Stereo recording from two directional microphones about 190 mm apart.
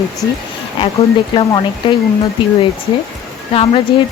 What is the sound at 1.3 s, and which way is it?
Speech, 25° left (ahead or behind).